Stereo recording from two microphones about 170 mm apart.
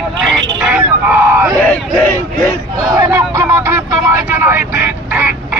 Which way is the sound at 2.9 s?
20° right (ahead or behind).